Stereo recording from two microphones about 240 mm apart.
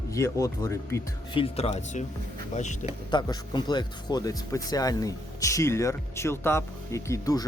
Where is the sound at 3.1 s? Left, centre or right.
Centre.